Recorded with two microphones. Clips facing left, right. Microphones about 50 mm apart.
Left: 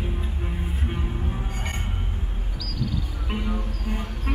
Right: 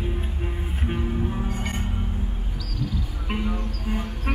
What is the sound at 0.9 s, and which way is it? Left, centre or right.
Music, centre.